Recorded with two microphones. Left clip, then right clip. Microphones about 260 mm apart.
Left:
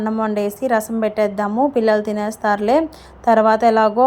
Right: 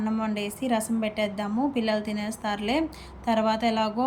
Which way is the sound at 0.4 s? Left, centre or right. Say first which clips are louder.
Left 9 dB; left.